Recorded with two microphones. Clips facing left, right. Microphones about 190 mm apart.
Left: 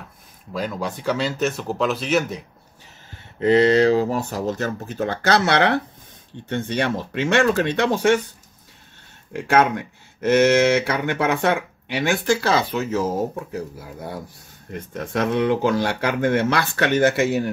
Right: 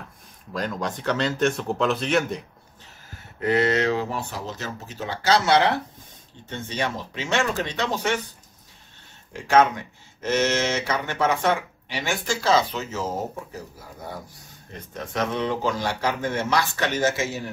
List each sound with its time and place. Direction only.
0.5 s speech: 5° left (ahead or behind)
3.3 s speech: 30° left (ahead or behind); by 8.2 s 55° left (ahead or behind)
9.3 s speech: 55° left (ahead or behind)
14.7 s speech: 55° left (ahead or behind)